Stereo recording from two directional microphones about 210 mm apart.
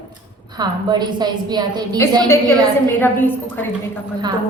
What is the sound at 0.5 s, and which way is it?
A woman's voice, 20° right (ahead or behind).